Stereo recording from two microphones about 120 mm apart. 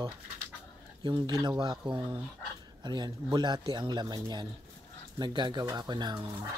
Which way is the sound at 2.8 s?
35° right (ahead or behind).